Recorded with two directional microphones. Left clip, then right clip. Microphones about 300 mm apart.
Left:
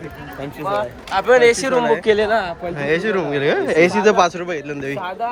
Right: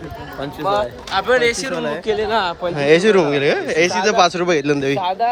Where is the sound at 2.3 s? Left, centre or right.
Centre.